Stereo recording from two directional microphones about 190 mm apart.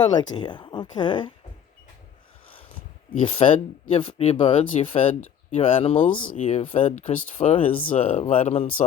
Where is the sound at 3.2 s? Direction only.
35° left (ahead or behind).